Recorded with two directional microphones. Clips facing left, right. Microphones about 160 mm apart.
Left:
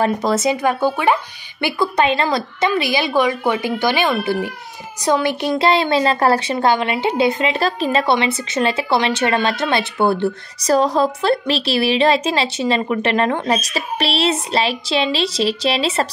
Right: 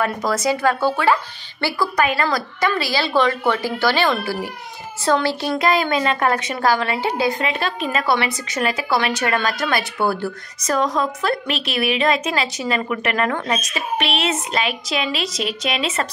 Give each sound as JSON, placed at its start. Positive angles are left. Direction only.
{"t": 0.0, "sound": "a child's voice", "side_deg": 25}
{"t": 5.6, "sound": "speech", "side_deg": 30}
{"t": 7.5, "sound": "a woman's voice", "side_deg": 35}